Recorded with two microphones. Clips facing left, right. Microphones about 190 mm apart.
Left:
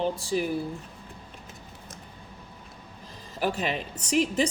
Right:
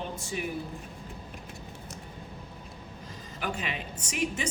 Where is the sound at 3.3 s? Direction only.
35° left (ahead or behind).